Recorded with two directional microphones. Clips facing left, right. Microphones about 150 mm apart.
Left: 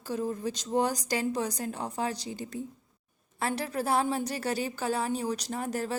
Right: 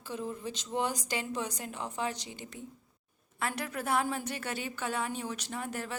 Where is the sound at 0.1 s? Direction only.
40° left (ahead or behind).